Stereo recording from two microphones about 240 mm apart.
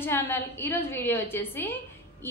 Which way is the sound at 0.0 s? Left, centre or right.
Centre.